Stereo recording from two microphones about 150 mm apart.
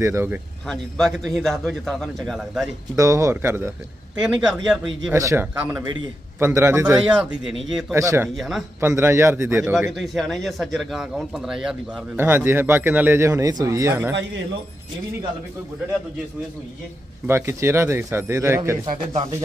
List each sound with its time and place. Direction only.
0.0 s a man's voice: 15° right (ahead or behind)
0.7 s a man's voice: centre (ahead or behind)
3.0 s speech: 20° right (ahead or behind)
4.2 s a man's voice: 5° right (ahead or behind)
5.1 s a man's voice: 20° right (ahead or behind); by 7.8 s centre (ahead or behind)
7.9 s speech: 20° right (ahead or behind)
8.4 s a man's voice: centre (ahead or behind)
8.8 s a man's voice: 15° right (ahead or behind)
9.8 s a man's voice: centre (ahead or behind)
12.2 s a man's voice: 15° right (ahead or behind)
17.3 s a man's voice: 20° right (ahead or behind)